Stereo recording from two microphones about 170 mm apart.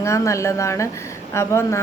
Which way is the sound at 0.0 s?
15° left (ahead or behind).